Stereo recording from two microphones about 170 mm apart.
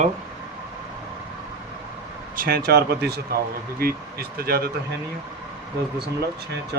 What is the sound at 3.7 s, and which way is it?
Speech, 65° right (ahead or behind).